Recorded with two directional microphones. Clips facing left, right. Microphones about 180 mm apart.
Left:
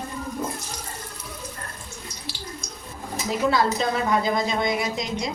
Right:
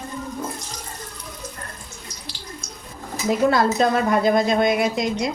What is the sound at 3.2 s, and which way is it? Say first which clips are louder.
A woman's voice: right 4 dB; 55° right (ahead or behind).